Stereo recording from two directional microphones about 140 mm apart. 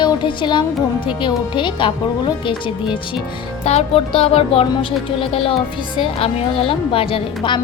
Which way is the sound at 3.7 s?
45° left (ahead or behind).